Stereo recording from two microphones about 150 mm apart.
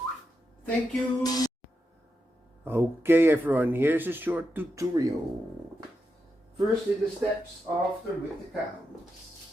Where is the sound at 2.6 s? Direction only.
15° right (ahead or behind).